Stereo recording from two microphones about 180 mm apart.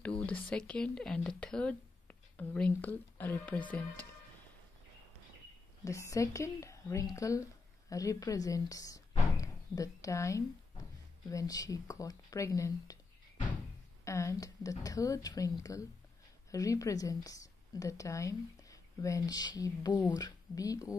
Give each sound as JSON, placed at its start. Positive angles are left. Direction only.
{"t": 0.3, "sound": "speech", "side_deg": 5}
{"t": 5.9, "sound": "a woman's voice", "side_deg": 15}
{"t": 14.0, "sound": "speech", "side_deg": 15}